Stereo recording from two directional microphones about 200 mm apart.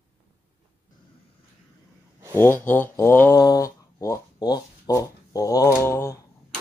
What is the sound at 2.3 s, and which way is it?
Speech, 10° left (ahead or behind).